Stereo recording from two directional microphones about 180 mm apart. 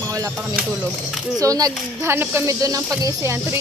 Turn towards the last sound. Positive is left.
turn(degrees=-15)  # may be behind; listen again after turning